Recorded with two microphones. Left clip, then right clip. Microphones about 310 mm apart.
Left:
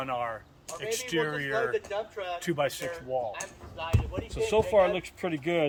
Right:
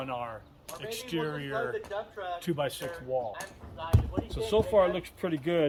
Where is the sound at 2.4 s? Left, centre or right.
Centre.